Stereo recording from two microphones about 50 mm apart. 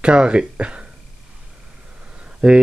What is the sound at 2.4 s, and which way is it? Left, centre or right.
Speech, right.